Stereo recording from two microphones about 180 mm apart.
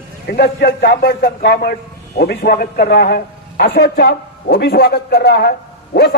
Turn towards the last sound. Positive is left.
turn(degrees=65)  # may be behind; listen again after turning